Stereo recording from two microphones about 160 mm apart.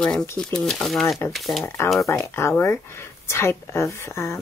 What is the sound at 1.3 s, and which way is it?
Speech, centre (ahead or behind).